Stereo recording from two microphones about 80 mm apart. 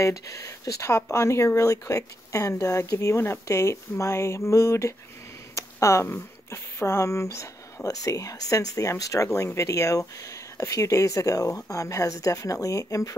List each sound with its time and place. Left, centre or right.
0.0 s speech: left
5.5 s a sound: left
6.1 s speech: left